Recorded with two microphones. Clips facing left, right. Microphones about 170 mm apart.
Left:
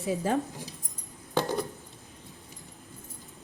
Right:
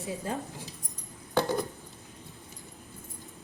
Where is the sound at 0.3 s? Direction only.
90° left.